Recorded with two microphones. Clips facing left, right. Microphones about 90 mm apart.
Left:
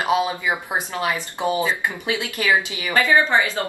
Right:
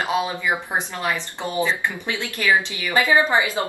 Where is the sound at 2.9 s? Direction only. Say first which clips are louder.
Even; 15° right (ahead or behind).